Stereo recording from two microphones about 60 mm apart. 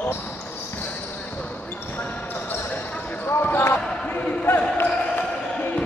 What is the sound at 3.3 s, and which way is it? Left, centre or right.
Basketball bounce, left.